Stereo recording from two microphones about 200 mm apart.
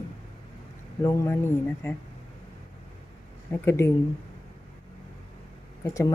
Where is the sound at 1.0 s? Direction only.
15° left (ahead or behind).